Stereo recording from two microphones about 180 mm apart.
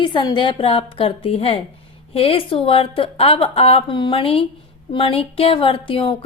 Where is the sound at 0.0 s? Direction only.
25° left (ahead or behind).